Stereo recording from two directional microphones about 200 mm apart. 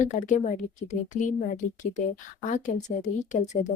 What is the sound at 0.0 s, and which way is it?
A woman's voice, 35° left (ahead or behind).